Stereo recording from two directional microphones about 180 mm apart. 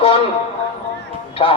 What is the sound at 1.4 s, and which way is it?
Speech, 30° left (ahead or behind).